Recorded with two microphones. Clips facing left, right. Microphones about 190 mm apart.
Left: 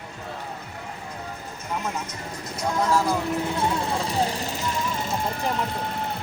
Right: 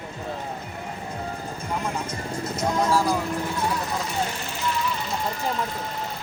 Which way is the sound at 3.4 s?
25° left (ahead or behind).